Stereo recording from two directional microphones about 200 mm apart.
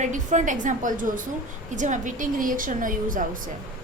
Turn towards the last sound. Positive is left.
turn(degrees=-40)  # may be behind; listen again after turning